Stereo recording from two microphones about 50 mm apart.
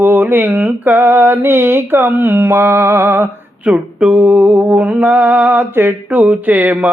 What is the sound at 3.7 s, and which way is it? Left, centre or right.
Mantra, right.